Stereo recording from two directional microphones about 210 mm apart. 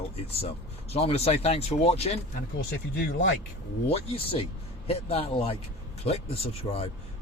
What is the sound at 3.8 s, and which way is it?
Speech, 25° left (ahead or behind).